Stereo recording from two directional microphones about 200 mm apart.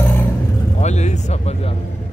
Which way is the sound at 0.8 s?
35° left (ahead or behind).